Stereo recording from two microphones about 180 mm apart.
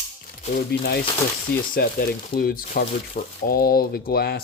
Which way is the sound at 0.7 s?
60° left (ahead or behind).